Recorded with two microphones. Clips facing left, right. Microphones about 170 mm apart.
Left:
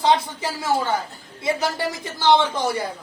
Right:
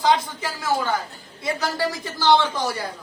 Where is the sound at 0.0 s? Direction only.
25° left (ahead or behind).